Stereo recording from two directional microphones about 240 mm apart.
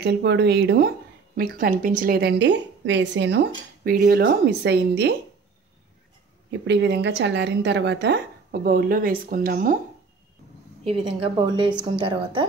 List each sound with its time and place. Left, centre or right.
0.0 s speech: right
6.5 s speech: right
10.8 s speech: right